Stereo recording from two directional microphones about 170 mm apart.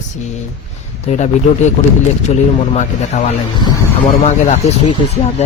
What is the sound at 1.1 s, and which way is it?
Speech, 45° left (ahead or behind).